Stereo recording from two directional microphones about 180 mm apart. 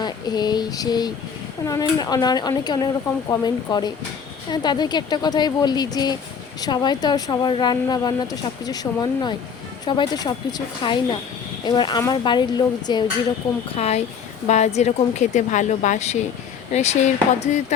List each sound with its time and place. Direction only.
0.0 s a sound: 25° left (ahead or behind)
1.6 s speech: 20° left (ahead or behind)
13.7 s a woman's voice: 35° left (ahead or behind)